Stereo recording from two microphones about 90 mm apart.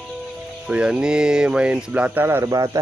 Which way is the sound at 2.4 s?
40° right (ahead or behind).